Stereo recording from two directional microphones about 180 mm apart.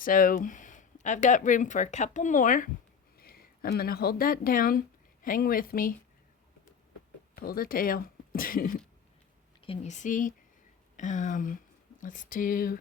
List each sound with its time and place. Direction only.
0.0 s speech: 50° left (ahead or behind)
3.2 s speech: 55° left (ahead or behind)
7.3 s speech: 55° left (ahead or behind)
9.6 s speech: 40° left (ahead or behind)